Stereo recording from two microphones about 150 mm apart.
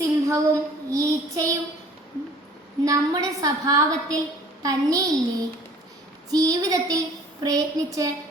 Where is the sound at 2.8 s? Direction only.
20° right (ahead or behind).